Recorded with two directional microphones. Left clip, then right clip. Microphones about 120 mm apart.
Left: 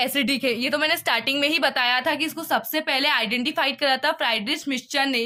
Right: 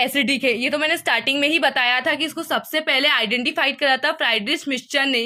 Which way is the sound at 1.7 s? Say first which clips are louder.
Right 3 dB; 30° right (ahead or behind).